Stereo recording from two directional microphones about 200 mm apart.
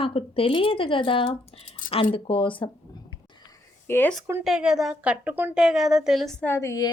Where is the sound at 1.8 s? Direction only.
40° left (ahead or behind).